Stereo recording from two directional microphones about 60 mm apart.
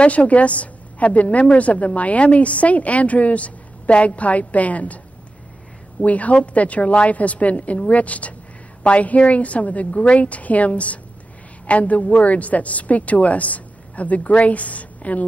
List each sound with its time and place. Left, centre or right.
0.0 s a woman's voice: left
6.0 s a woman's voice: left